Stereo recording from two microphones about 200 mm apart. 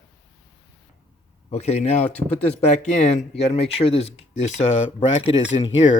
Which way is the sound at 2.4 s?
35° left (ahead or behind).